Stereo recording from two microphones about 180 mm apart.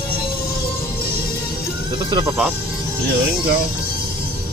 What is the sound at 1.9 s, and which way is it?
Speech, 25° right (ahead or behind).